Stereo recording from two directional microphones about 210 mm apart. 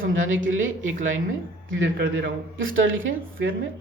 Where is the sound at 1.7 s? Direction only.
55° right (ahead or behind).